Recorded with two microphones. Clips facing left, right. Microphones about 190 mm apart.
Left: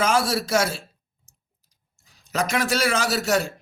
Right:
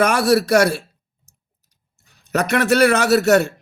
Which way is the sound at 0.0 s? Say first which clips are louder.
Right 6 dB; 65° right (ahead or behind).